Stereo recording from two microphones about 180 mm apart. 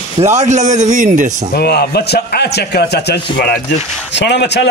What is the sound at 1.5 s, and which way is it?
A man's voice, 65° left (ahead or behind).